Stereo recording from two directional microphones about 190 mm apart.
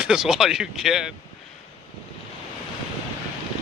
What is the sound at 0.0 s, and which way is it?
Speech, 5° right (ahead or behind).